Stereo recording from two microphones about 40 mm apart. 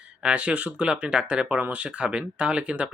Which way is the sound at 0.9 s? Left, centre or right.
Right.